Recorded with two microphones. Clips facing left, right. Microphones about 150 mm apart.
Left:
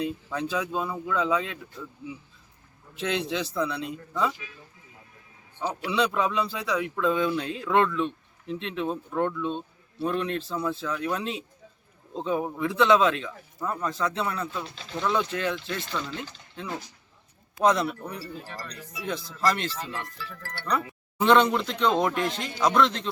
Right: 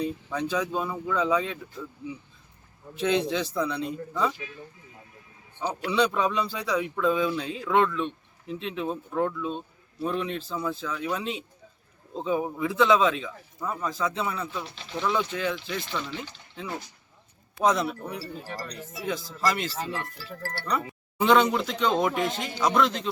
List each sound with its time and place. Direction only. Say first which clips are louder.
0.0 s speech: right 1 dB; centre (ahead or behind)
2.9 s speech: right 4 dB; centre (ahead or behind)
5.6 s speech: right 1 dB; centre (ahead or behind); by 18.9 s 15° right (ahead or behind)
19.0 s speech: left 1 dB; 5° right (ahead or behind)
20.1 s speech: right 3 dB; 35° right (ahead or behind)
21.2 s speech: left 1 dB; 5° right (ahead or behind)